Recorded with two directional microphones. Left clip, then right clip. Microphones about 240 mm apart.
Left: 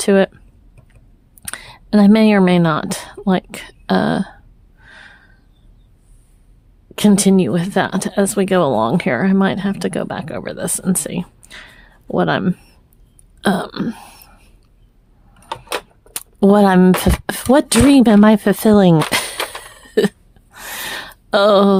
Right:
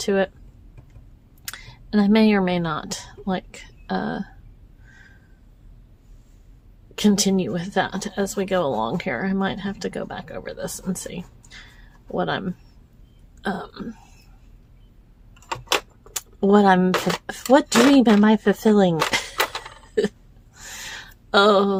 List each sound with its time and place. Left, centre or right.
0.0 s speech: left
1.4 s speech: left
4.9 s a sound: left
6.9 s speech: left
16.1 s speech: left
19.9 s hiccup: left